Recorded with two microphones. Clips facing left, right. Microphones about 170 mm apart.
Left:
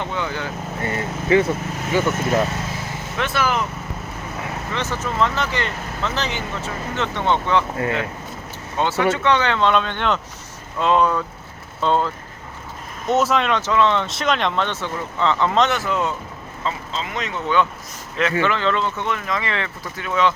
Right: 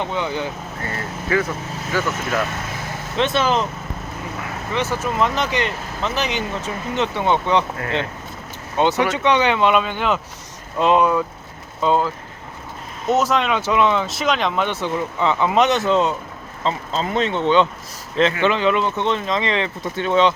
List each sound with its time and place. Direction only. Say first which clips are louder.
0.0 s speech: right 2 dB; 15° right (ahead or behind)
0.8 s speech: left 5 dB; 20° left (ahead or behind)
3.2 s speech: right 3 dB; 20° right (ahead or behind)
4.7 s speech: right 4 dB; 10° right (ahead or behind)
8.8 s speech: right 2 dB; 20° right (ahead or behind)
10.8 s speech: right 2 dB; 15° right (ahead or behind); by 13.6 s centre (ahead or behind)
13.6 s speech: right 1 dB; 15° right (ahead or behind)
16.6 s speech: right 5 dB; 40° right (ahead or behind)